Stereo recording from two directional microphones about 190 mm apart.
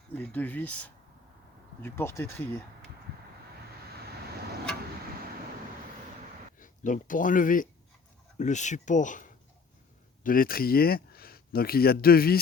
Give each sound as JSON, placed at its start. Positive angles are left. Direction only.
{"t": 0.1, "sound": "speech", "side_deg": 10}
{"t": 1.8, "sound": "speech", "side_deg": 15}
{"t": 6.6, "sound": "speech", "side_deg": 45}